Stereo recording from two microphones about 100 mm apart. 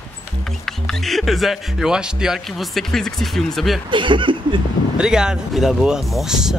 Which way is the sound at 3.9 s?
55° right (ahead or behind).